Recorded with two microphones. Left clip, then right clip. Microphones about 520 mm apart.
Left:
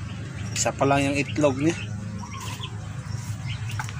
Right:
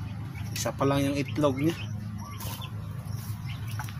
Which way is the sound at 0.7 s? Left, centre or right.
Right.